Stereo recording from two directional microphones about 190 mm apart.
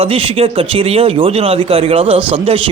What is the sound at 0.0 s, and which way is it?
Speech, 30° right (ahead or behind).